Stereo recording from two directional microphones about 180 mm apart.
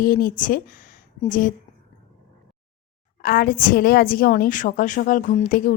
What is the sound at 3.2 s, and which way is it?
A woman's voice, 55° left (ahead or behind).